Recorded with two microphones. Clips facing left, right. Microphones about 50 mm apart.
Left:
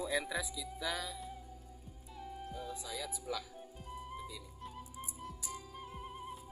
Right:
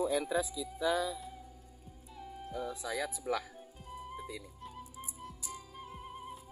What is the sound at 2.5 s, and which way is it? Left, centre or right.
Speech, right.